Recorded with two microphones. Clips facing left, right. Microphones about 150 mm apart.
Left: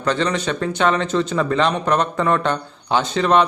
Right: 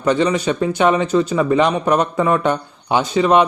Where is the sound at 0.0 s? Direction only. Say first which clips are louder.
Right 4 dB; 10° right (ahead or behind).